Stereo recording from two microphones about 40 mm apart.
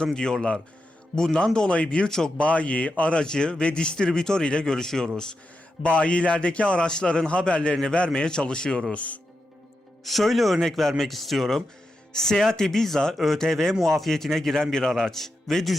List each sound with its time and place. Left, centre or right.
0.0 s a man's voice: centre
2.0 s a man's voice: centre
2.4 s a man's voice: left; by 5.0 s centre
5.8 s a man's voice: left
8.9 s speech: left
10.0 s a man's voice: centre
12.1 s a man's voice: centre